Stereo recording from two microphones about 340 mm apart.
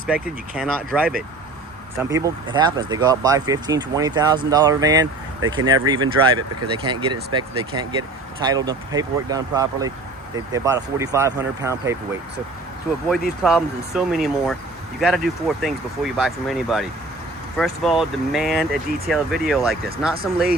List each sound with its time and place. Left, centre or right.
0.1 s speech: centre
13.4 s speech: centre